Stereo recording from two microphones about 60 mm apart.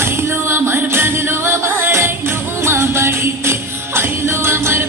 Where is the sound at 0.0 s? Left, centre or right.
Right.